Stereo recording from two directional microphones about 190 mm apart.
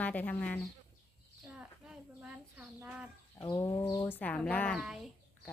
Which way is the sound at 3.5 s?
15° left (ahead or behind).